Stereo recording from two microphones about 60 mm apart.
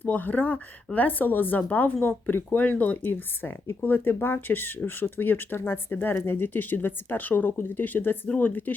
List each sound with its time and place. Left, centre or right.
0.0 s a woman's voice: left